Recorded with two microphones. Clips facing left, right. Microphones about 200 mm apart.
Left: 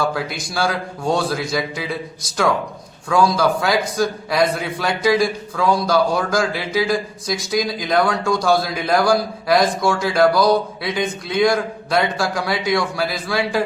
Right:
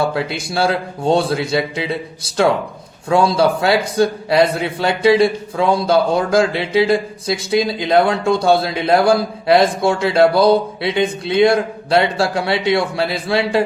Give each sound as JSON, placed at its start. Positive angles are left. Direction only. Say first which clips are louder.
{"t": 0.0, "sound": "a man's voice", "louder": "right 3 dB", "side_deg": -25}